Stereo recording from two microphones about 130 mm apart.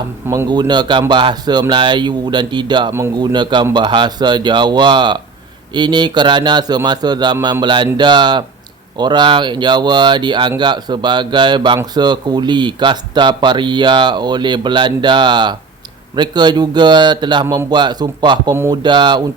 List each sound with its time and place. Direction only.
0.3 s speech: 30° right (ahead or behind)
17.4 s a man's voice: 20° right (ahead or behind)
17.7 s speech: 35° right (ahead or behind)